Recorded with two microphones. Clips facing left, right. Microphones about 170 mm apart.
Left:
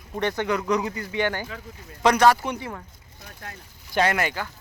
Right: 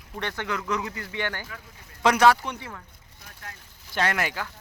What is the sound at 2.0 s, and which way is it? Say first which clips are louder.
Speech: left 1 dB; centre (ahead or behind).